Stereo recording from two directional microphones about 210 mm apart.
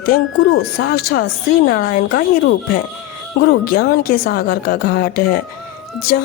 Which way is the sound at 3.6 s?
45° left (ahead or behind).